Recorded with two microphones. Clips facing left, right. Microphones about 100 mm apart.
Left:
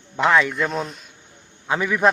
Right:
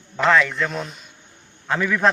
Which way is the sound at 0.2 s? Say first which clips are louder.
Even; 15° left (ahead or behind).